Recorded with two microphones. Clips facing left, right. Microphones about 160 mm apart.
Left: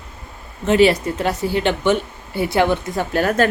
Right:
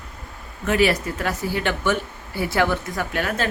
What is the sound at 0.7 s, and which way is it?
Speech, 25° left (ahead or behind).